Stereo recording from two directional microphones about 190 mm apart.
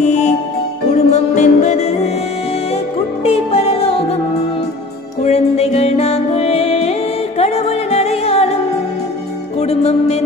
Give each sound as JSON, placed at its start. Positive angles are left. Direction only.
{"t": 0.0, "sound": "music", "side_deg": 40}
{"t": 3.3, "sound": "music", "side_deg": 30}
{"t": 5.2, "sound": "music", "side_deg": 35}
{"t": 9.6, "sound": "music", "side_deg": 35}